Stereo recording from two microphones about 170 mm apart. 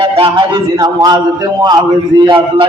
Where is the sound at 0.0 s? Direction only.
30° right (ahead or behind).